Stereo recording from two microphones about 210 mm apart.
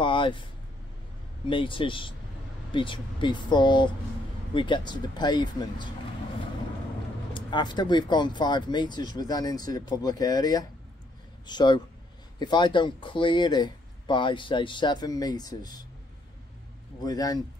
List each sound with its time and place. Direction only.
0.0 s vehicle: 25° left (ahead or behind)
1.5 s speech: 25° left (ahead or behind)
7.3 s speech: 20° left (ahead or behind)
17.0 s speech: 20° left (ahead or behind)